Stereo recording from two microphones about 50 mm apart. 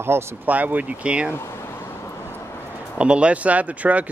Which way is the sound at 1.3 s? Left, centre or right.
Left.